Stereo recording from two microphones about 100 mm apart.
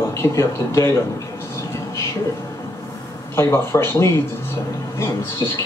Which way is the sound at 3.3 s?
25° left (ahead or behind).